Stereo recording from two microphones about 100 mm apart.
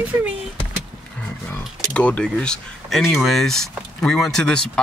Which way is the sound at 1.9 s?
10° left (ahead or behind).